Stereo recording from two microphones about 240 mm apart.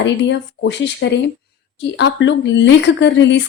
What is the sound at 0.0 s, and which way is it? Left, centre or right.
A woman's voice, left.